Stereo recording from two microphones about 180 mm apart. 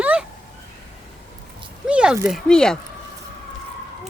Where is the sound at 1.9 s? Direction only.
5° right (ahead or behind).